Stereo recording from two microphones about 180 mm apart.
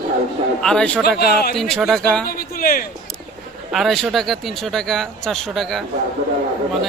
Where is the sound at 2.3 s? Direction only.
55° left (ahead or behind).